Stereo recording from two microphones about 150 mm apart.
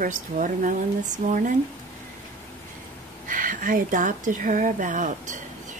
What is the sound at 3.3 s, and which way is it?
A woman's voice, 65° right (ahead or behind).